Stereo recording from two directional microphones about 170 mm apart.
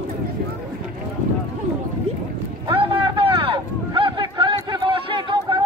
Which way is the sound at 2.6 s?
30° right (ahead or behind).